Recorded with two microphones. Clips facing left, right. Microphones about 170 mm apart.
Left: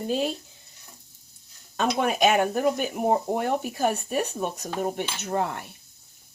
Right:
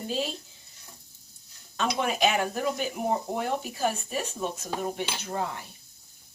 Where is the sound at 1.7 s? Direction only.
50° left (ahead or behind).